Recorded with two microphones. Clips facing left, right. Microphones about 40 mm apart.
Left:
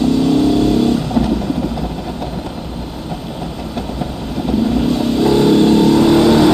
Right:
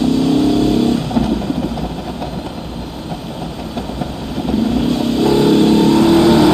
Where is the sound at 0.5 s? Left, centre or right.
Right.